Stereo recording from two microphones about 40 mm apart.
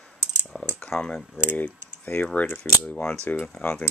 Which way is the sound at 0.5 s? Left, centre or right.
Left.